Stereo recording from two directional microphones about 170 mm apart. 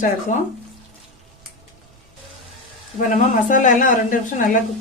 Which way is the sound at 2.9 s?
50° left (ahead or behind).